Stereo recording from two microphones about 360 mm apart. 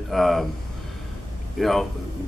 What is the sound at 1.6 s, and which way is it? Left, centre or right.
Speech, centre.